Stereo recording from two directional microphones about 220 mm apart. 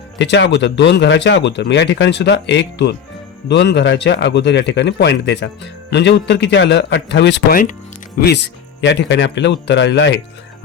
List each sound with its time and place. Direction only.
0.2 s speech: 50° left (ahead or behind)